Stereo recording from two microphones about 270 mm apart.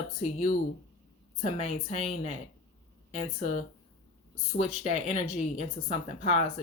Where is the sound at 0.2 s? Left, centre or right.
Left.